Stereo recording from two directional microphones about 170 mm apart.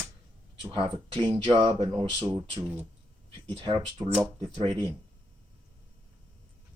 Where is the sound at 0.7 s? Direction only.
30° right (ahead or behind).